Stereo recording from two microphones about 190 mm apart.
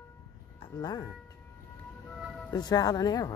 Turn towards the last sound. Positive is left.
turn(degrees=20)  # may be behind; listen again after turning